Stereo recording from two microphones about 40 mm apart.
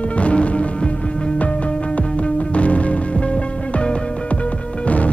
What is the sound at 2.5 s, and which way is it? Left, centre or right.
Music, left.